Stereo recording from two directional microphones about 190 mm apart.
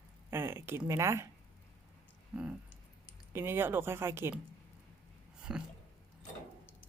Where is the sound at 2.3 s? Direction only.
5° right (ahead or behind).